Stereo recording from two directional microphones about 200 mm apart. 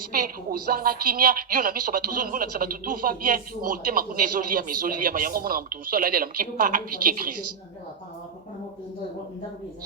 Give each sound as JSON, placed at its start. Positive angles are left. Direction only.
{"t": 0.7, "sound": "speech", "side_deg": -45}